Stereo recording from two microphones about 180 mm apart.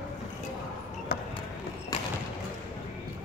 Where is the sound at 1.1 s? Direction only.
60° left (ahead or behind).